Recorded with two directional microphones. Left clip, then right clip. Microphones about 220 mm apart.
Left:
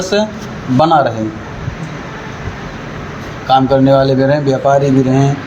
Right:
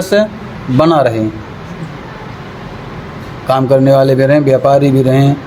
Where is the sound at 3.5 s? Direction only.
45° right (ahead or behind).